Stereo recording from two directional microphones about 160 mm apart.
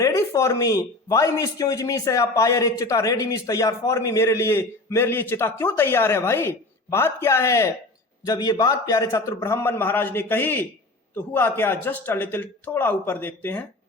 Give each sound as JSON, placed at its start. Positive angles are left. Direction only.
{"t": 0.0, "sound": "a man's voice", "side_deg": 20}